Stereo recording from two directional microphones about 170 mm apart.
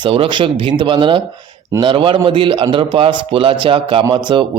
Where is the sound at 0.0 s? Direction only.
30° right (ahead or behind).